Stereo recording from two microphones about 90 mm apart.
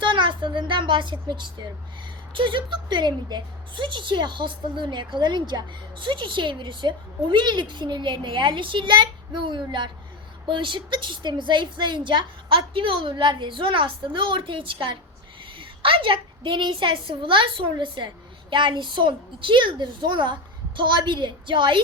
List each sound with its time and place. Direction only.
0.0 s a woman's voice: 65° right (ahead or behind)
2.3 s a woman's voice: 65° right (ahead or behind)
15.5 s a woman's voice: 80° right; by 21.8 s 65° right (ahead or behind)